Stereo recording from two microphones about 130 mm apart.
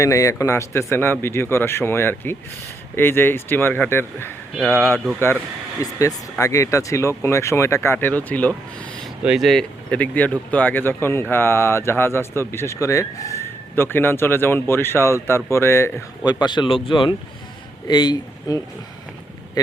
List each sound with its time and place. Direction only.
0.0 s a man's voice: 25° left (ahead or behind)
5.8 s speech: 30° left (ahead or behind); by 8.9 s 10° left (ahead or behind)
9.2 s speech: centre (ahead or behind); by 15.9 s 20° left (ahead or behind)
16.2 s speech: 35° left (ahead or behind)